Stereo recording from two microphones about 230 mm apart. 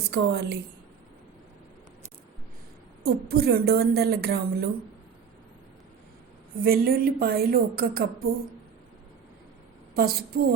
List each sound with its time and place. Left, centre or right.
0.1 s a woman's voice: right
3.0 s a woman's voice: right
6.6 s a woman's voice: right
9.9 s a woman's voice: right